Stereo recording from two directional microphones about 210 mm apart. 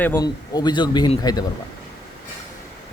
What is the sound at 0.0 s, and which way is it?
Speech, 15° left (ahead or behind).